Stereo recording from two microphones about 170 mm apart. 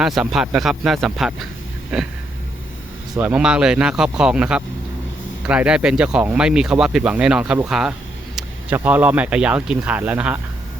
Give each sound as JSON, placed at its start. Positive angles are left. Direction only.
{"t": 0.0, "sound": "speech", "side_deg": 0}
{"t": 3.2, "sound": "speech", "side_deg": -10}